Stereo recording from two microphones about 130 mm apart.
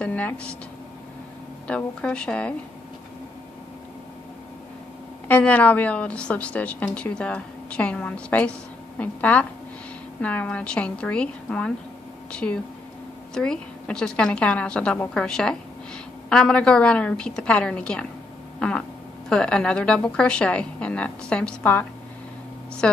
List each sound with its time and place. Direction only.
0.0 s a woman's voice: 10° left (ahead or behind)
1.7 s a woman's voice: 10° left (ahead or behind)
5.3 s a woman's voice: 10° left (ahead or behind)